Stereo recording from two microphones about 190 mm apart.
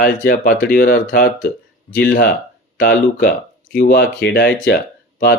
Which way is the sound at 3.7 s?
45° left (ahead or behind).